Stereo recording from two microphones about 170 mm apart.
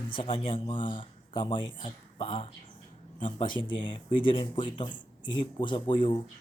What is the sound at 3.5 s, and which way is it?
Speech, 30° left (ahead or behind).